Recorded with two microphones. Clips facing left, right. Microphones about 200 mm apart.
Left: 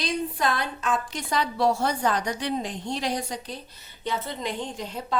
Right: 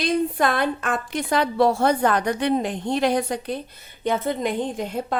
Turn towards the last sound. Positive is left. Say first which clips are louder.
# right 5 dB
turn(degrees=-55)  # may be behind; listen again after turning